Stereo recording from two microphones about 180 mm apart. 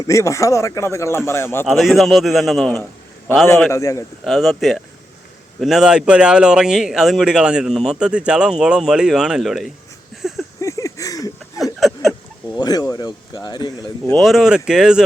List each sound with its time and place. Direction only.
0.1 s speech: 15° left (ahead or behind)
1.6 s a man's voice: centre (ahead or behind)
3.7 s speech: 15° left (ahead or behind)
4.2 s a man's voice: centre (ahead or behind)
10.2 s a sound: centre (ahead or behind)
10.6 s a sound: 15° left (ahead or behind)
11.6 s a sound: centre (ahead or behind)
12.5 s speech: 20° left (ahead or behind)
14.1 s a man's voice: centre (ahead or behind)